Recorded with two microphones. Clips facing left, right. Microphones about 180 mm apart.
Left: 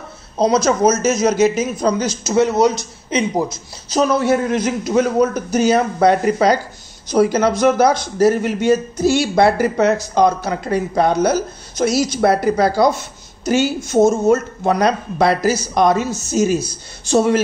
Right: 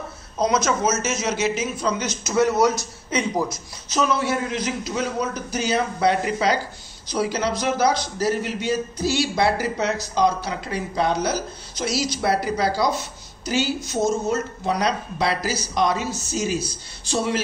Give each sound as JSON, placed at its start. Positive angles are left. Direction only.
{"t": 0.4, "sound": "a man's voice", "side_deg": 35}
{"t": 3.9, "sound": "a man's voice", "side_deg": 40}